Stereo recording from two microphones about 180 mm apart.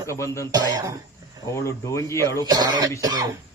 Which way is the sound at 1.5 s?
15° left (ahead or behind).